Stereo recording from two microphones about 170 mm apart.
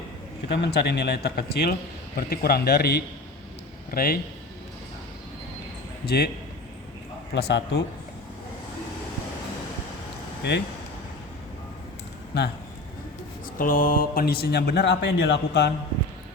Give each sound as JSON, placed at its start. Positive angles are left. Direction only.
{"t": 0.5, "sound": "speech", "side_deg": 75}
{"t": 6.1, "sound": "speech", "side_deg": 65}
{"t": 7.3, "sound": "a man's voice", "side_deg": 80}
{"t": 10.4, "sound": "speech", "side_deg": 75}
{"t": 13.6, "sound": "speech", "side_deg": 55}